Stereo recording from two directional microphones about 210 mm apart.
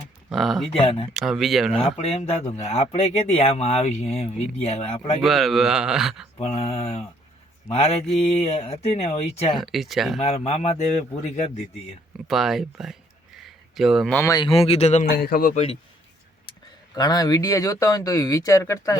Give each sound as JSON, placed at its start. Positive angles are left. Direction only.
{"t": 0.3, "sound": "speech", "side_deg": 0}
{"t": 0.7, "sound": "speech", "side_deg": 25}
{"t": 1.1, "sound": "speech", "side_deg": 0}
{"t": 1.7, "sound": "speech", "side_deg": 25}
{"t": 5.2, "sound": "speech", "side_deg": 0}
{"t": 6.3, "sound": "speech", "side_deg": 30}
{"t": 9.6, "sound": "speech", "side_deg": 0}
{"t": 10.2, "sound": "speech", "side_deg": 30}
{"t": 12.3, "sound": "speech", "side_deg": 0}
{"t": 13.4, "sound": "a sound", "side_deg": 0}
{"t": 14.2, "sound": "speech", "side_deg": 20}
{"t": 15.1, "sound": "a man's voice", "side_deg": 45}
{"t": 16.5, "sound": "speech", "side_deg": 20}